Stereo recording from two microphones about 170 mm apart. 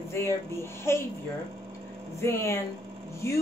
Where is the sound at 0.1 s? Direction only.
15° left (ahead or behind).